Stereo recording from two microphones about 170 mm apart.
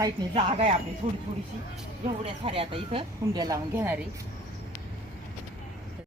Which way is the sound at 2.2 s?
35° right (ahead or behind).